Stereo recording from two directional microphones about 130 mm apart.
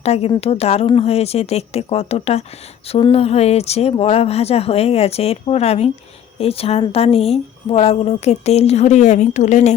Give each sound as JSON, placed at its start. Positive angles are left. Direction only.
{"t": 0.0, "sound": "a woman's voice", "side_deg": 55}